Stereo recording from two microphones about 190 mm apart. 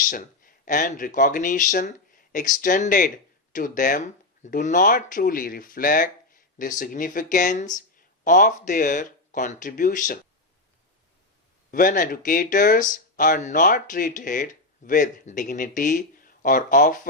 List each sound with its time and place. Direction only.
0.0 s speech: 45° left (ahead or behind)
11.7 s speech: 45° left (ahead or behind)